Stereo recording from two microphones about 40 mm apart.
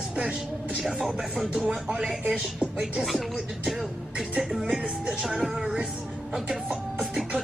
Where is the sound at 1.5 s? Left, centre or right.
Right.